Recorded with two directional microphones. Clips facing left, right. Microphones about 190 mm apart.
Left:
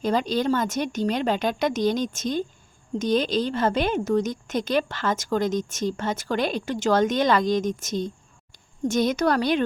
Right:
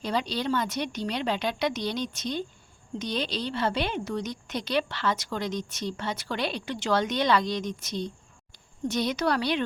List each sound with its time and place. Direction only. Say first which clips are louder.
0.0 s a woman's voice: left 6 dB; 45° left (ahead or behind)